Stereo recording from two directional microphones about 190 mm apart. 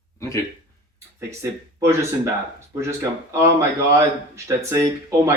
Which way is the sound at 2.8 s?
15° right (ahead or behind).